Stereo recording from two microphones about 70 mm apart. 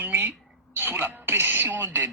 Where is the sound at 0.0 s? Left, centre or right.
Right.